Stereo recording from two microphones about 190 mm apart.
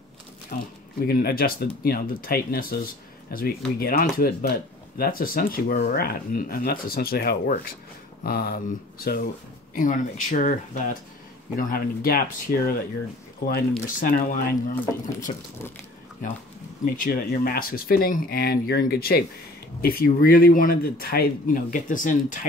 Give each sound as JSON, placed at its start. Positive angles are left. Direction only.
{"t": 0.5, "sound": "speech", "side_deg": 50}
{"t": 16.8, "sound": "speech", "side_deg": 50}